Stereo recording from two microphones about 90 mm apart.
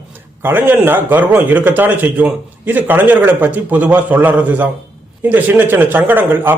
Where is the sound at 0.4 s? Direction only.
25° right (ahead or behind).